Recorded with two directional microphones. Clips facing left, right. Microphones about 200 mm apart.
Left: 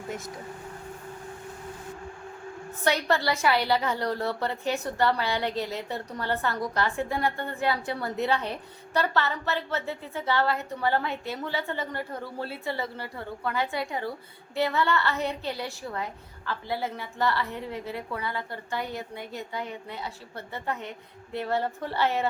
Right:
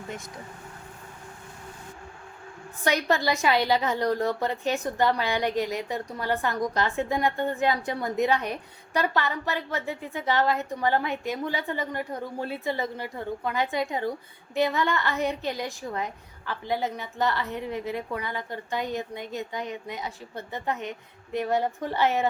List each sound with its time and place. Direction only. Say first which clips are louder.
2.8 s a woman's voice: right 1 dB; 15° right (ahead or behind)